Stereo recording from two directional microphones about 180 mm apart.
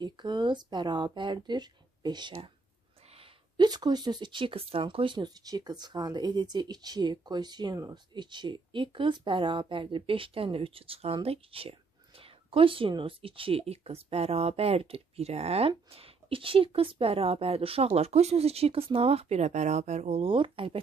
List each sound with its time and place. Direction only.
0.0 s a woman's voice: 25° right (ahead or behind)